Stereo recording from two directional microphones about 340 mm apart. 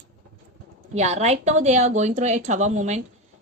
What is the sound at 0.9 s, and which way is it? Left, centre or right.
Speech, centre.